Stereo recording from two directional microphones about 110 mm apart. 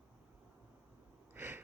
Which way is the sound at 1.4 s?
20° right (ahead or behind).